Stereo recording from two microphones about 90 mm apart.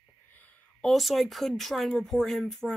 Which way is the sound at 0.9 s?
Centre (ahead or behind).